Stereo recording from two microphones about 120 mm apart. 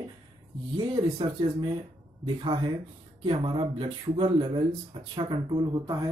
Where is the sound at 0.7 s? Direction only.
45° right (ahead or behind).